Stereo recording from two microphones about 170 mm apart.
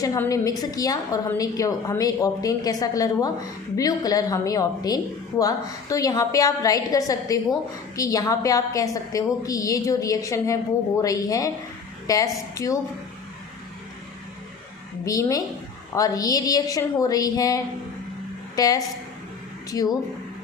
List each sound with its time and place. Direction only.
0.0 s a woman's voice: 20° left (ahead or behind)
15.0 s a woman's voice: 20° left (ahead or behind)